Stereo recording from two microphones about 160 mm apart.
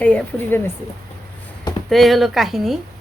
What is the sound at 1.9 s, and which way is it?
Speech, centre (ahead or behind).